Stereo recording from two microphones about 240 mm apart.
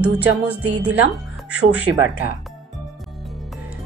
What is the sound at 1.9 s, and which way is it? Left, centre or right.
Speech, right.